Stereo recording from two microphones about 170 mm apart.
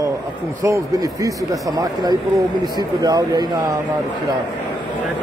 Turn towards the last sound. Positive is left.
turn(degrees=-20)  # may be behind; listen again after turning